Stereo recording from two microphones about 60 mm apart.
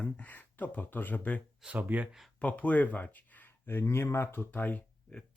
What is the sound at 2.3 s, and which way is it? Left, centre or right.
Speech, left.